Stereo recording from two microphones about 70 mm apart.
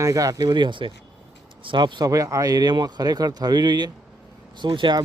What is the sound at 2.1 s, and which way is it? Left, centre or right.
Speech, right.